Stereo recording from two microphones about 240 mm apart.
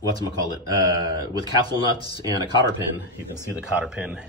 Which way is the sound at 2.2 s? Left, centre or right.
Centre.